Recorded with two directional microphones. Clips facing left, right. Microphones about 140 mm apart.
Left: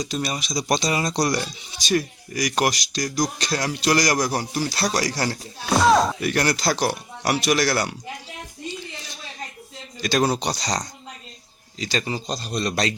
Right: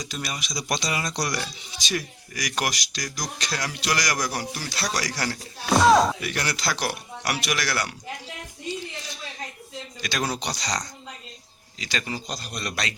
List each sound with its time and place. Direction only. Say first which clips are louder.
0.0 s speech: left 6 dB; 30° left (ahead or behind)
5.6 s speech: even; centre (ahead or behind)
6.2 s speech: left 7 dB; 45° left (ahead or behind)
10.0 s speech: left 8 dB; 35° left (ahead or behind)